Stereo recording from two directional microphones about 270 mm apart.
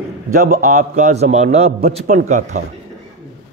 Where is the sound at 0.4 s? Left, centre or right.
Right.